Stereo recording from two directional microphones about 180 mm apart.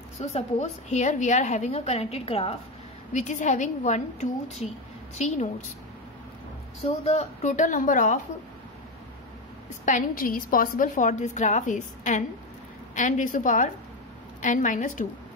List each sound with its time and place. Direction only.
0.3 s a woman's voice: 40° left (ahead or behind)
7.0 s a woman's voice: 35° left (ahead or behind)
9.8 s a woman's voice: 50° left (ahead or behind)